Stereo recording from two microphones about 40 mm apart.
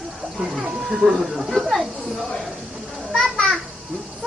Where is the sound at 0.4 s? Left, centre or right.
Centre.